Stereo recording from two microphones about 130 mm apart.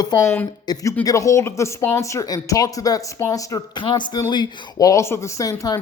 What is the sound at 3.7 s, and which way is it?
Speech, 35° left (ahead or behind).